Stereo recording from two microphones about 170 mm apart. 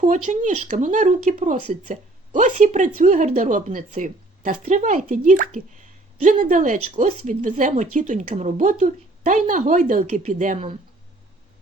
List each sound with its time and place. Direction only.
0.0 s speech: 45° right (ahead or behind)